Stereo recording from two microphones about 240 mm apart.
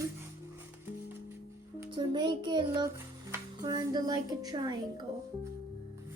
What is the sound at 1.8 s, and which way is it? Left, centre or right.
Music, centre.